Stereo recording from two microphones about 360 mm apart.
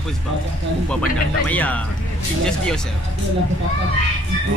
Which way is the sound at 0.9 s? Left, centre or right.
Centre.